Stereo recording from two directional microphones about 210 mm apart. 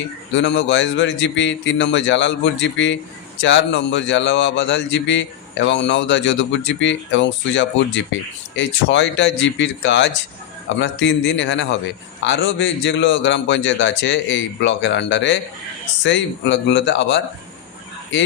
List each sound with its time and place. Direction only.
0.3 s a man's voice: 60° left (ahead or behind)